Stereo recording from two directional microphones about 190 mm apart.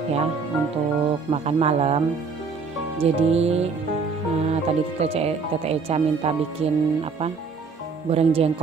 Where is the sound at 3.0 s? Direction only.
35° right (ahead or behind).